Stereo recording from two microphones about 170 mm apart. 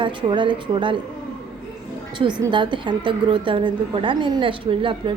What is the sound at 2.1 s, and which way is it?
A woman's voice, 25° right (ahead or behind).